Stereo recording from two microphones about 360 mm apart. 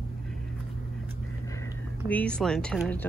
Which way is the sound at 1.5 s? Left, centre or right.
Centre.